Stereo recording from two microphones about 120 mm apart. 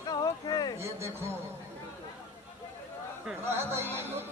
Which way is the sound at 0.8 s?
20° right (ahead or behind).